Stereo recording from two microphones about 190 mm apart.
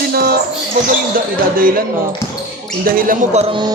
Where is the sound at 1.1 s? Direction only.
50° right (ahead or behind).